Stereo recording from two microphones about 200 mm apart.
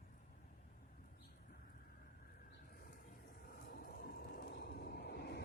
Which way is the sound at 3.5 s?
50° left (ahead or behind).